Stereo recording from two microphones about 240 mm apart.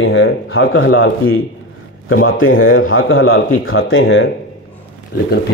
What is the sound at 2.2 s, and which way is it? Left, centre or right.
Speech, left.